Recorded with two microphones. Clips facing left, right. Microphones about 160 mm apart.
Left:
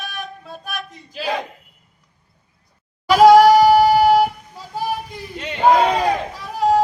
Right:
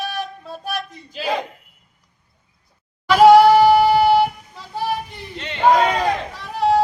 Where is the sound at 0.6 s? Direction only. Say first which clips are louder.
Right 5 dB; 30° right (ahead or behind).